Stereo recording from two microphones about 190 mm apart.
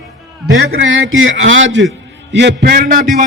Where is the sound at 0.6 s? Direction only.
90° right.